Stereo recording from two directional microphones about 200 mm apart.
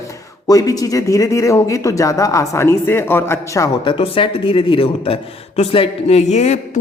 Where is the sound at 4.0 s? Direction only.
25° left (ahead or behind).